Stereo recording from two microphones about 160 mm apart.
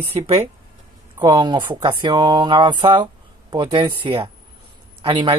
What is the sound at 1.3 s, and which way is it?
Speech, 30° right (ahead or behind).